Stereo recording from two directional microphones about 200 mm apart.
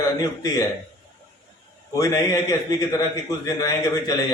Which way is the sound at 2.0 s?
15° left (ahead or behind).